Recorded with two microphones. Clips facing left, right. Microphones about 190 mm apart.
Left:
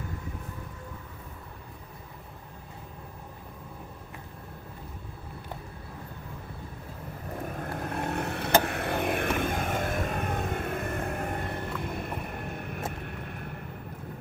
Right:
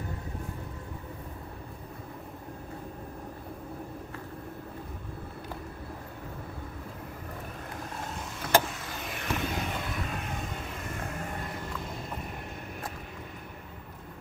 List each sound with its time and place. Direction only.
7.5 s vehicle: 55° left (ahead or behind)